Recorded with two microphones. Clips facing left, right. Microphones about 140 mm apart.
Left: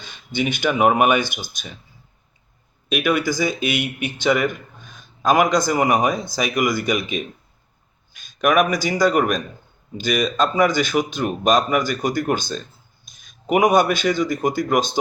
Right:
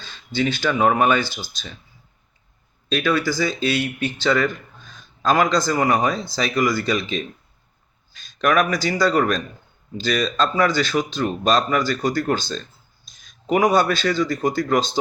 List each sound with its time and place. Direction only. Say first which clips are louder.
0.0 s a man's voice: right 1 dB; 15° left (ahead or behind)
2.9 s a man's voice: left 1 dB; 15° left (ahead or behind)